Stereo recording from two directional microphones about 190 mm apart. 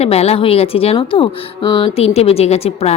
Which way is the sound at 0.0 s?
35° left (ahead or behind).